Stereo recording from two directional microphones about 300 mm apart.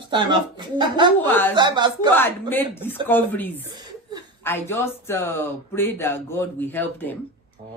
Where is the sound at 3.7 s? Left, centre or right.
Centre.